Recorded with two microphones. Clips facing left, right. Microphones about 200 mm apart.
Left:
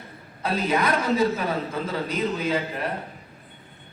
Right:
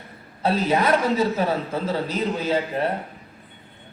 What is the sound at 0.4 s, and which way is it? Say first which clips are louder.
A man's voice: right 3 dB; 30° right (ahead or behind).